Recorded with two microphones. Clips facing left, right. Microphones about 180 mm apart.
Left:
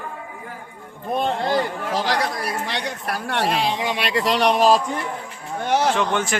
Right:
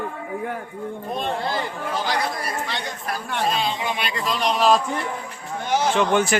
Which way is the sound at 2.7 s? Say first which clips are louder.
Left 2 dB; 75° left (ahead or behind).